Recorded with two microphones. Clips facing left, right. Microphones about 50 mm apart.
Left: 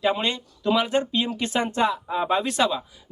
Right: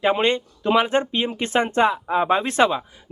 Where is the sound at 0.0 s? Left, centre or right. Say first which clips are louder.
Right 5 dB; right.